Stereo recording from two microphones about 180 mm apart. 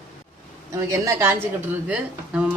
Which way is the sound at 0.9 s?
15° right (ahead or behind).